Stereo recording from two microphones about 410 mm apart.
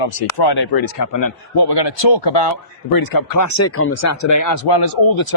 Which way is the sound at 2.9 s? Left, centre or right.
Left.